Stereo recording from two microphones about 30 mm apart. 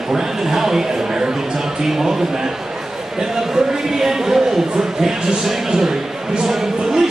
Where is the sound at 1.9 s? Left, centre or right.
Centre.